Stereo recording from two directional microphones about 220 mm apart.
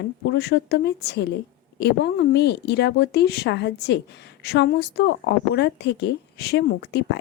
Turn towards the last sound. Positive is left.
turn(degrees=50)  # may be behind; listen again after turning